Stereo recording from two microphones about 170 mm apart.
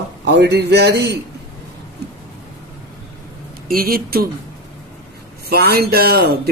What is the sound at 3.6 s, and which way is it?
Speech, 60° right (ahead or behind).